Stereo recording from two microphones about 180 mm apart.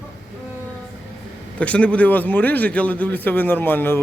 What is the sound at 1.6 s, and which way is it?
A man's voice, 5° left (ahead or behind).